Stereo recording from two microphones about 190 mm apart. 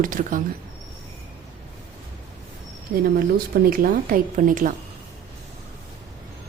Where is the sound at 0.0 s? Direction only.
45° right (ahead or behind).